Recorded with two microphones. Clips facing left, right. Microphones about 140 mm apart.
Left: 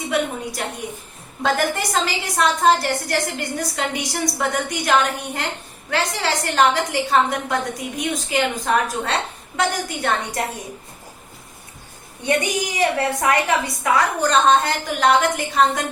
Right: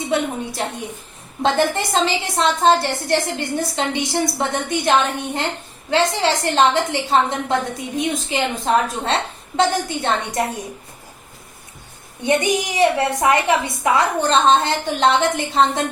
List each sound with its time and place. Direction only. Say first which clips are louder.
1.4 s a woman's voice: right 3 dB; 25° right (ahead or behind)
12.2 s a woman's voice: right 3 dB; 20° right (ahead or behind)